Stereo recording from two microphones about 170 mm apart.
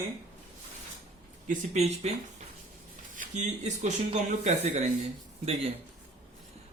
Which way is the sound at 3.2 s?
45° right (ahead or behind).